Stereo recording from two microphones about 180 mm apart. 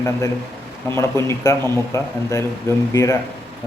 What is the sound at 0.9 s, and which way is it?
A man's voice, 15° left (ahead or behind).